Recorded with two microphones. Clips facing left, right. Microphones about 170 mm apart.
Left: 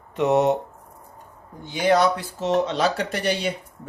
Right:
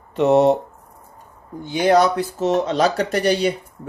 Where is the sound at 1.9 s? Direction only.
40° right (ahead or behind).